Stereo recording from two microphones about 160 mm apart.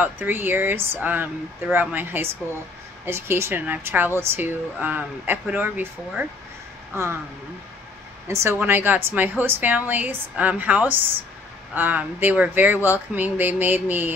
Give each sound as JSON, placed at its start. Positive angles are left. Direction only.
{"t": 0.0, "sound": "a woman's voice", "side_deg": -10}
{"t": 8.3, "sound": "a woman's voice", "side_deg": -15}